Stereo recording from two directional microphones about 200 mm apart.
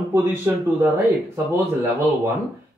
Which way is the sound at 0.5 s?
15° right (ahead or behind).